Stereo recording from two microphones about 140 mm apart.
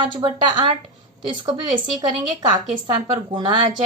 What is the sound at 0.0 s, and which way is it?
Speech, 30° right (ahead or behind).